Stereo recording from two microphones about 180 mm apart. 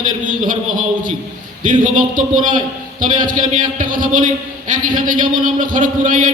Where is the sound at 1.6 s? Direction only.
45° right (ahead or behind).